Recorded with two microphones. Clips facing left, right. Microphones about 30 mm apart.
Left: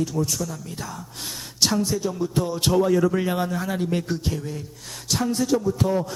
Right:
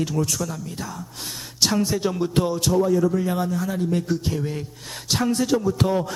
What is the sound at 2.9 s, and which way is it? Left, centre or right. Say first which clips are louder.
Speech: even; left.